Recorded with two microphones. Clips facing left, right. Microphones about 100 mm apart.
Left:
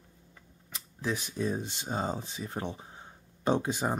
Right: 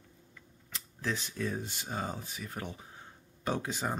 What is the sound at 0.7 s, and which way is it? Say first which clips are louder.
Speech: left 2 dB; 15° left (ahead or behind).